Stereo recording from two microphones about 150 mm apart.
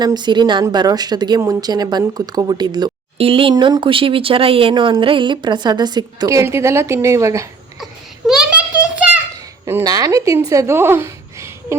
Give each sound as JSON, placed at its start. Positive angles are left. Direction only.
{"t": 0.0, "sound": "a woman's voice", "side_deg": -30}
{"t": 8.3, "sound": "a sound", "side_deg": -5}
{"t": 9.6, "sound": "speech", "side_deg": -20}